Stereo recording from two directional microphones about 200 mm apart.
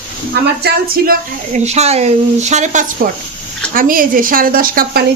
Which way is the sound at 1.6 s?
35° right (ahead or behind).